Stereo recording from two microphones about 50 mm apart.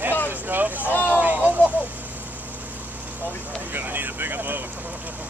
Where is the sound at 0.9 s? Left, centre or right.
Left.